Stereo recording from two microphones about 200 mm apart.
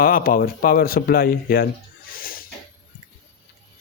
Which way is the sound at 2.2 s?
45° left (ahead or behind).